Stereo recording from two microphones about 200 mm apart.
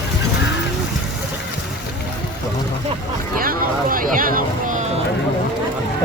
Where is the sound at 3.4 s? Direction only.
45° right (ahead or behind).